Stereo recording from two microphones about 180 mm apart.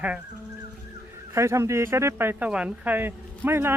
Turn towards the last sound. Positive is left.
turn(degrees=-10)  # may be behind; listen again after turning